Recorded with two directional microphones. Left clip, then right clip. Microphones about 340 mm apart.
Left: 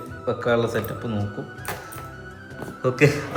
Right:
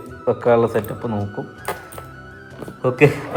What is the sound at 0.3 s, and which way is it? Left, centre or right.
Speech, centre.